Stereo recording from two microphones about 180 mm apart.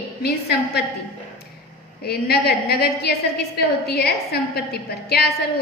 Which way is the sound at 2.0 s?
60° left (ahead or behind).